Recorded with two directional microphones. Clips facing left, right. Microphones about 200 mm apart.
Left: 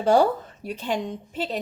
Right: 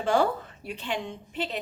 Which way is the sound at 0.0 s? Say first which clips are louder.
Left 5 dB; 40° left (ahead or behind).